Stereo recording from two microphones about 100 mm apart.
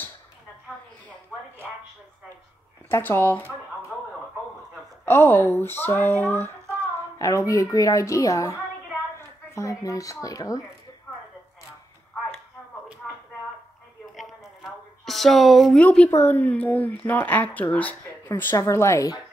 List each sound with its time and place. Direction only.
2.9 s speech: 20° left (ahead or behind)
5.0 s speech: 20° left (ahead or behind)
7.2 s speech: 30° left (ahead or behind)
14.1 s a sound: centre (ahead or behind)
15.8 s speech: 15° left (ahead or behind); by 19.2 s 35° left (ahead or behind)